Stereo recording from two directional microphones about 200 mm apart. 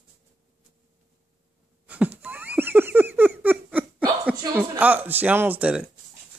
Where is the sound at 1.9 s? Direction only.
5° right (ahead or behind).